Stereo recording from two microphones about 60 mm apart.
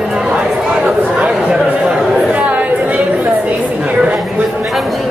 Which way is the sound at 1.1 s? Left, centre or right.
Centre.